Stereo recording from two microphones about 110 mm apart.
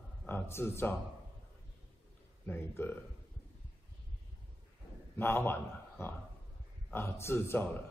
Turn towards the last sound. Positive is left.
turn(degrees=20)  # may be behind; listen again after turning